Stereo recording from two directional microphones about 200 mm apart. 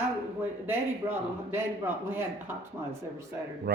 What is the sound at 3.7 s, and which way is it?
Speech, 50° right (ahead or behind).